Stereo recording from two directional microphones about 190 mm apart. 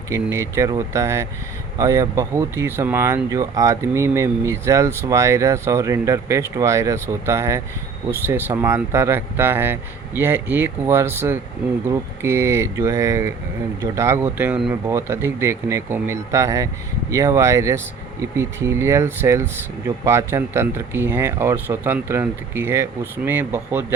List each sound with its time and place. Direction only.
0.1 s speech: 15° right (ahead or behind)